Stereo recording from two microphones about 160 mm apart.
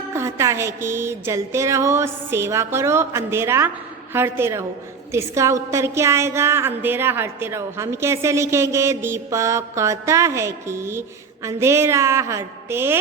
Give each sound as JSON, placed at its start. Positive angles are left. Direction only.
{"t": 0.1, "sound": "a woman's voice", "side_deg": -15}